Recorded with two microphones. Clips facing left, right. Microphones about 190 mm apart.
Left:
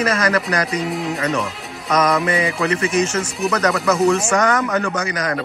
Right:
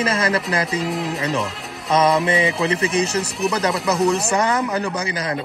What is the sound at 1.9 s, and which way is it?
Speech, 30° right (ahead or behind).